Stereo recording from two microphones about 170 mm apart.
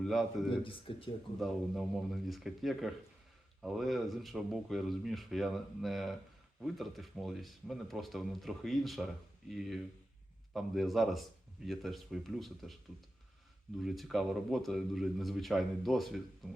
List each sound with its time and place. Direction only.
0.0 s speech: centre (ahead or behind)
0.6 s speech: 30° left (ahead or behind)
1.4 s speech: centre (ahead or behind)
13.7 s speech: centre (ahead or behind)